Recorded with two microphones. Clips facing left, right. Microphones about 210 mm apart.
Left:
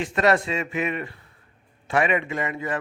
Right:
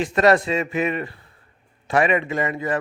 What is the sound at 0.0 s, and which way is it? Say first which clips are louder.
Speech: right 4 dB; 35° right (ahead or behind).